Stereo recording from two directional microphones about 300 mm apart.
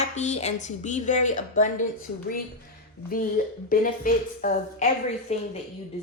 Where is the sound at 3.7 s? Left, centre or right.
Left.